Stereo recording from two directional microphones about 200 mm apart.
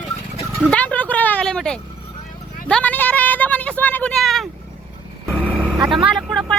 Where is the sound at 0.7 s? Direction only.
5° left (ahead or behind).